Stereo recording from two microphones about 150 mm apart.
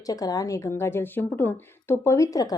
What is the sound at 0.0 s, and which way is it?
Speech, 25° left (ahead or behind).